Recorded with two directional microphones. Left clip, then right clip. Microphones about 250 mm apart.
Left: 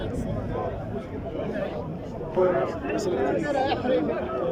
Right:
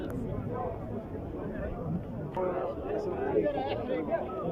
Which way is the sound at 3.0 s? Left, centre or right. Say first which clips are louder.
Left 4 dB; left.